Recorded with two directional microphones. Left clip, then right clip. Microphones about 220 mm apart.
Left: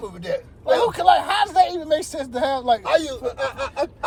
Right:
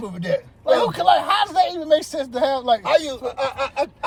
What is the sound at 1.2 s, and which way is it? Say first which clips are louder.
Speech: even; 40° right (ahead or behind).